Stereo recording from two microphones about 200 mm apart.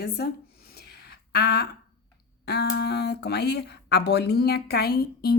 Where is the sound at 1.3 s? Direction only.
55° left (ahead or behind).